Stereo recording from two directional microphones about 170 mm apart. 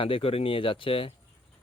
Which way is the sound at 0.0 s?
35° left (ahead or behind).